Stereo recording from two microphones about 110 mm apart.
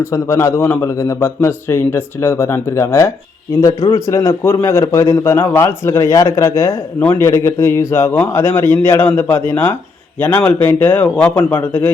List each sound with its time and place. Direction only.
0.0 s a man's voice: 25° left (ahead or behind)